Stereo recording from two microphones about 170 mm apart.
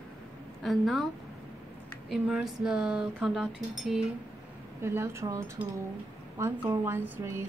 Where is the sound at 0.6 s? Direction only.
Centre (ahead or behind).